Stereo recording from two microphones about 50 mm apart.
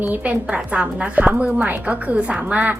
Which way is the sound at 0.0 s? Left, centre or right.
Right.